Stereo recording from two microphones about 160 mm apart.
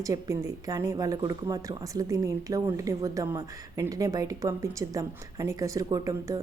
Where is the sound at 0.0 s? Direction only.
20° right (ahead or behind).